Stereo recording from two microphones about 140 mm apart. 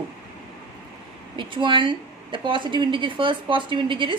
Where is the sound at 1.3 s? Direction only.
35° right (ahead or behind).